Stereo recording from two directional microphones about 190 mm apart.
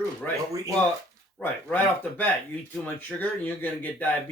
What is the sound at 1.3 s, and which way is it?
Speech, 10° left (ahead or behind).